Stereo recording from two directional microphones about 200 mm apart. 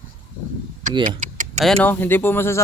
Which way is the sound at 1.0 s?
40° right (ahead or behind).